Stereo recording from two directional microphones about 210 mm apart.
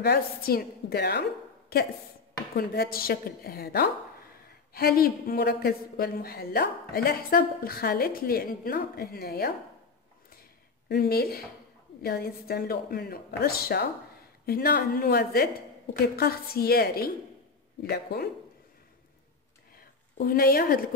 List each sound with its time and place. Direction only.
0.0 s a woman's voice: 45° left (ahead or behind)
10.9 s a woman's voice: 45° left (ahead or behind)
19.7 s a sound: 45° left (ahead or behind)